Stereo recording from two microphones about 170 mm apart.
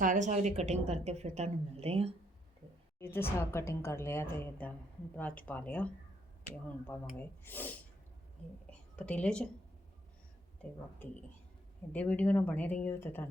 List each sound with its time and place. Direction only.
0.0 s a woman's voice: 45° right (ahead or behind)
3.0 s a woman's voice: 15° left (ahead or behind)
9.0 s a woman's voice: 5° left (ahead or behind)
11.9 s a woman's voice: 10° left (ahead or behind)